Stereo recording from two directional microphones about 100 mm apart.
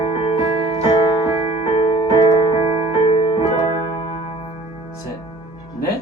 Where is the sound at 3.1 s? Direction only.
70° left (ahead or behind).